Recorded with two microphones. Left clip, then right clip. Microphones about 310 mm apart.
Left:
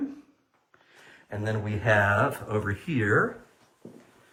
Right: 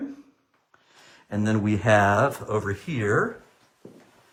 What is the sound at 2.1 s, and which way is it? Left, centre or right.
Speech, centre.